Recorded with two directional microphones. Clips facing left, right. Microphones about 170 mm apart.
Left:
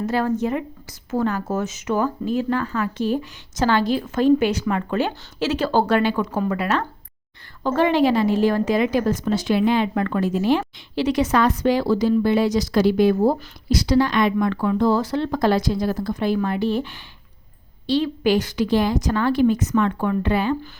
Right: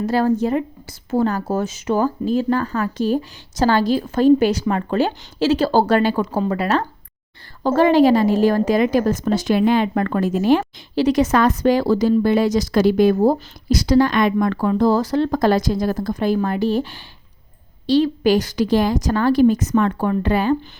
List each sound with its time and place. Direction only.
0.0 s a woman's voice: 35° right (ahead or behind)